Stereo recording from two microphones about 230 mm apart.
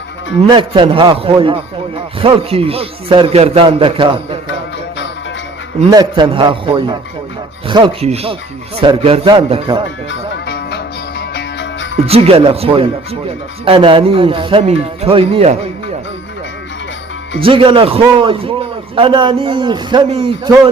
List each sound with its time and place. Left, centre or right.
0.5 s speech: right
5.9 s speech: centre
10.1 s music: left
12.0 s speech: right
17.4 s speech: right